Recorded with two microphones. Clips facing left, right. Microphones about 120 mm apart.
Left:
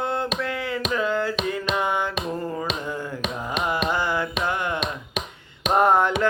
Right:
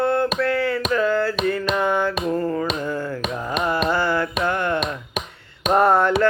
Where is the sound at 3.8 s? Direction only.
15° left (ahead or behind).